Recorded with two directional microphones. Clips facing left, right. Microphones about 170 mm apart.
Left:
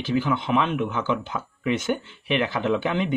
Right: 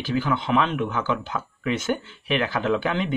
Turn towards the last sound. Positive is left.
turn(degrees=20)  # may be behind; listen again after turning